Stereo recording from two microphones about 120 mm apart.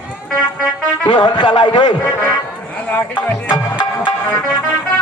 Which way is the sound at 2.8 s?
15° left (ahead or behind).